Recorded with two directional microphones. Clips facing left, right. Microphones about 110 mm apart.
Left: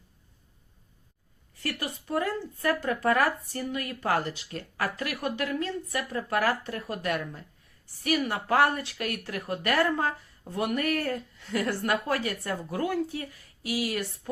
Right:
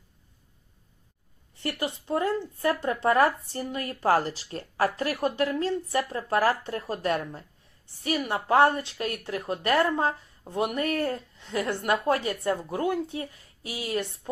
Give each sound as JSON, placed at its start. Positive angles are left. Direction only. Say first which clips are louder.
{"t": 1.5, "sound": "speech", "louder": "right 3 dB", "side_deg": -25}